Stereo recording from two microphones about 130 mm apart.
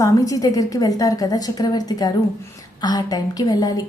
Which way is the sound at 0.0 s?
25° left (ahead or behind).